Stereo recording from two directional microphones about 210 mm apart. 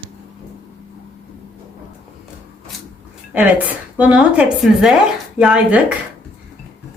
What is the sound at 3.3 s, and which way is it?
Speech, 5° right (ahead or behind).